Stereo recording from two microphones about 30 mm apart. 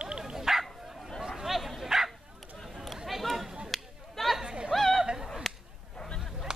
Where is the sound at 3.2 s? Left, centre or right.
Centre.